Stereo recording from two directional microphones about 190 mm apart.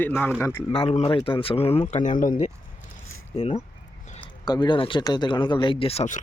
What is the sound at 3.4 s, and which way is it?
Speech, 30° left (ahead or behind).